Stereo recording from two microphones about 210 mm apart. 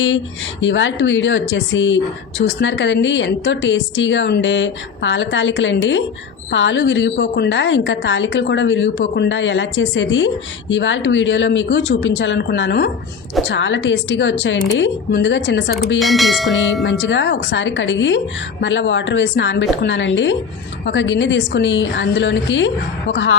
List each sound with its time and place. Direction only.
0.6 s a woman's voice: 60° left (ahead or behind)
16.0 s speech: centre (ahead or behind)
16.8 s a woman's voice: 60° left (ahead or behind)